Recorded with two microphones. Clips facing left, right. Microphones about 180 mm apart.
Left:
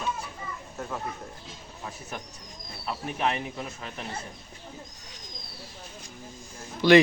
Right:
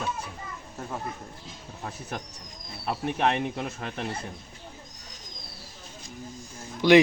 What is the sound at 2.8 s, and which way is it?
Speech, 55° right (ahead or behind).